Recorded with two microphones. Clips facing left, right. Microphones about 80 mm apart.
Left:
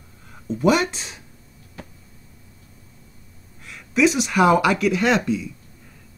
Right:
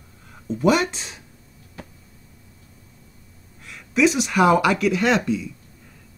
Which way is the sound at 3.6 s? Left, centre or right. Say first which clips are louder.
Even; centre.